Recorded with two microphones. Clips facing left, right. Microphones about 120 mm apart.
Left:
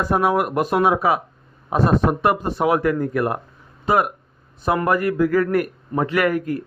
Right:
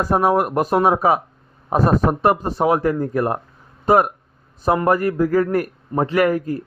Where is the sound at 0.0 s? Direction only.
35° right (ahead or behind).